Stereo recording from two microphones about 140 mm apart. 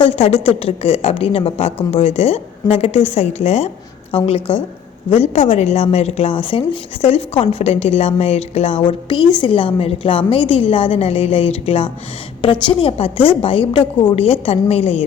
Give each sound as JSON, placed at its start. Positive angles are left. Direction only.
{"t": 0.0, "sound": "a woman's voice", "side_deg": 45}